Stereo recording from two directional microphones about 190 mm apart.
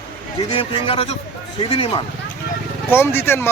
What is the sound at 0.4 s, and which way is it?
Speech, 30° left (ahead or behind).